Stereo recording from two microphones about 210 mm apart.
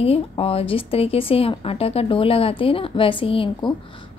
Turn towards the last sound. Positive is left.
turn(degrees=25)  # may be behind; listen again after turning